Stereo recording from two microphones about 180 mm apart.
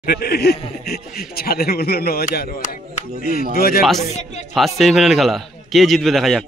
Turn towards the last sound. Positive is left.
turn(degrees=0)  # may be behind; listen again after turning